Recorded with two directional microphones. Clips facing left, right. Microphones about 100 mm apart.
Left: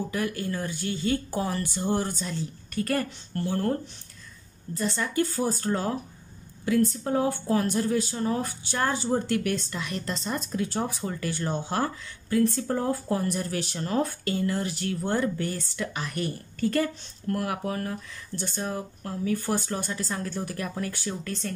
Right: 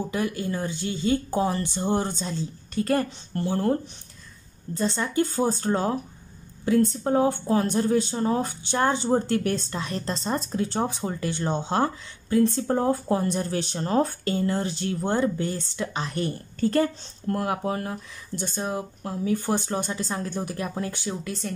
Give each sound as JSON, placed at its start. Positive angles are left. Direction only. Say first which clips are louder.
{"t": 0.1, "sound": "speech", "louder": "right 2 dB", "side_deg": -20}
{"t": 4.7, "sound": "speech", "louder": "right 2 dB", "side_deg": -25}